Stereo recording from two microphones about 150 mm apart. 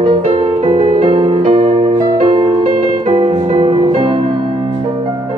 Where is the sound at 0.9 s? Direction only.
45° right (ahead or behind).